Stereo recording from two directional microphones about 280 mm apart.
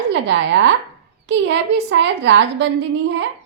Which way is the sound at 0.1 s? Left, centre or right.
Right.